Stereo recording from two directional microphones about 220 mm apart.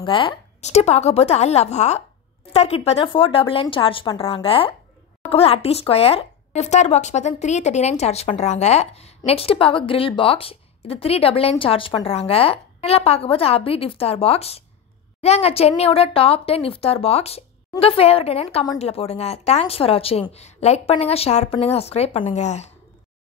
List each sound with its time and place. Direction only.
0.0 s speech: 20° left (ahead or behind)